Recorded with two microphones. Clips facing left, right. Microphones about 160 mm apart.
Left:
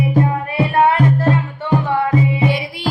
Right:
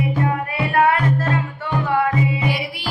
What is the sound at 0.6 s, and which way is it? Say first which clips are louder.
Music: left 4 dB; 25° left (ahead or behind).